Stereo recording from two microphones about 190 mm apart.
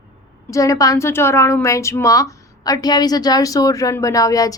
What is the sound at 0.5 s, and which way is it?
A woman's voice, 15° left (ahead or behind).